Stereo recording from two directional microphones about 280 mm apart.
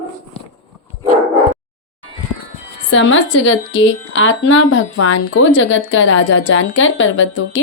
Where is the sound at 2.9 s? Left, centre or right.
Left.